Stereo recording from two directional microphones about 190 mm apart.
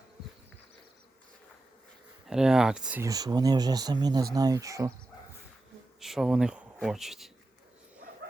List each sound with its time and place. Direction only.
2.2 s speech: 5° right (ahead or behind)
3.1 s speech: 20° right (ahead or behind)
6.0 s speech: centre (ahead or behind)